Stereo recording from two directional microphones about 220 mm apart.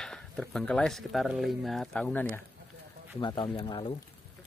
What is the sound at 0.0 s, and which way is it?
Speech, 5° left (ahead or behind).